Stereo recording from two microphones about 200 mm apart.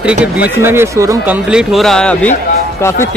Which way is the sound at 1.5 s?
5° right (ahead or behind).